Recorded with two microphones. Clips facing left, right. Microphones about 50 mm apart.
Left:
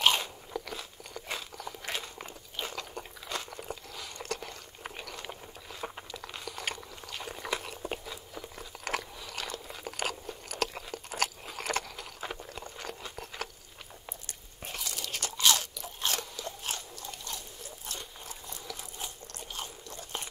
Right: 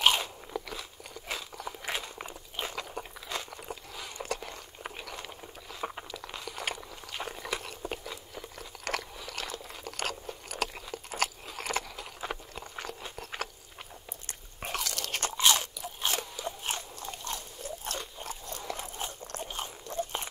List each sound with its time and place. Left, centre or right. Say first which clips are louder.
0.2 s biting: right 1 dB; centre
2.7 s crunch: right 2 dB; centre
3.4 s a sound: left 1 dB; centre
6.1 s a sound: right 1 dB; centre
8.8 s chewing: even; centre
10.2 s biting: even; centre
13.4 s biting: right 2 dB; centre
14.7 s crunch: right 4 dB; right
15.0 s crunch: right 4 dB; right
15.3 s crunch: right 1 dB; right
15.8 s crunch: right 1 dB; centre
16.6 s biting: right 2 dB; right